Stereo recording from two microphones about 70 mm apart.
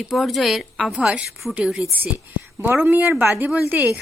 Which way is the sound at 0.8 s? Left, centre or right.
Centre.